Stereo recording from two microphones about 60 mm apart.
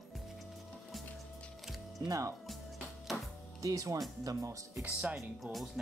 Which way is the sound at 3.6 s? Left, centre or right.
Right.